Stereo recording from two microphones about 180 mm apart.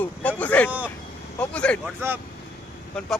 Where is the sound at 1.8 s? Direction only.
10° right (ahead or behind).